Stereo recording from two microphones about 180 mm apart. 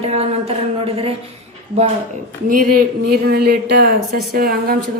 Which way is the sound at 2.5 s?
50° right (ahead or behind).